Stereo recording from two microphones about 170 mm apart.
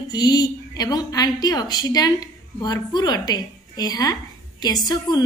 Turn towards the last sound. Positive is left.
turn(degrees=25)  # may be behind; listen again after turning